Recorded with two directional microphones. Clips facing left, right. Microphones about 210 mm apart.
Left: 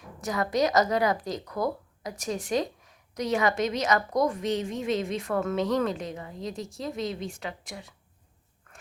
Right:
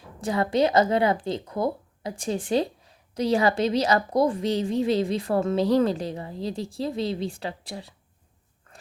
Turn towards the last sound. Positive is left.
turn(degrees=-35)  # may be behind; listen again after turning